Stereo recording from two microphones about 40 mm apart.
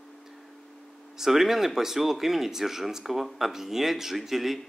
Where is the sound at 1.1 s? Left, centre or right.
Centre.